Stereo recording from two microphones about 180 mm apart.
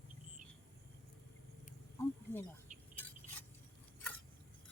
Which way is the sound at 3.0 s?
10° left (ahead or behind).